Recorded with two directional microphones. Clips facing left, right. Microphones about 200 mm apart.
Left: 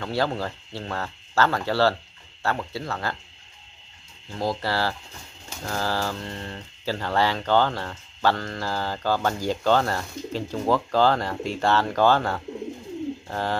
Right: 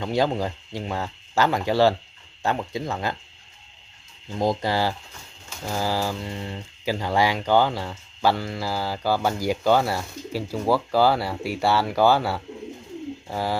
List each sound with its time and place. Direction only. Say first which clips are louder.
0.0 s speech: right 3 dB; 15° right (ahead or behind)
4.3 s speech: right 3 dB; 20° right (ahead or behind)